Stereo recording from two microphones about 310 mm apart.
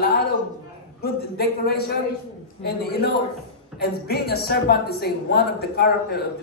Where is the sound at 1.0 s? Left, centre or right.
Left.